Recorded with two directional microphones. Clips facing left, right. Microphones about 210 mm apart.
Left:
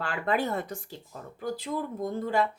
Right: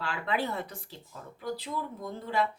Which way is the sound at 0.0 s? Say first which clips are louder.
Left 4 dB; 50° left (ahead or behind).